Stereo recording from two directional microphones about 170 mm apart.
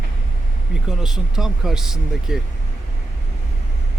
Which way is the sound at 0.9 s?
5° right (ahead or behind).